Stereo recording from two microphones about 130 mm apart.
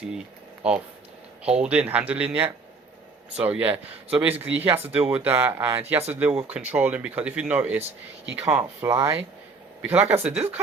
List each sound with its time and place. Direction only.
0.6 s speech: 10° right (ahead or behind)